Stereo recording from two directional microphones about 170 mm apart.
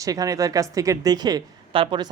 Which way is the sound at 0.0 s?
20° right (ahead or behind).